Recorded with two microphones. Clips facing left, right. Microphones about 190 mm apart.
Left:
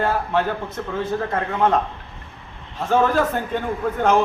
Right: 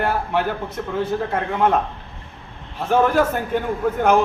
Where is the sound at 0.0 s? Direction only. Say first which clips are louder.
Even; 10° right (ahead or behind).